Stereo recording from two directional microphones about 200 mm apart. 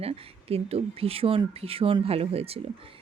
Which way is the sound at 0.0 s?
30° right (ahead or behind).